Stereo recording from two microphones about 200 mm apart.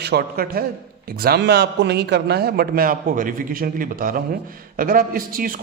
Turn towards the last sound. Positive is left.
turn(degrees=-45)  # may be behind; listen again after turning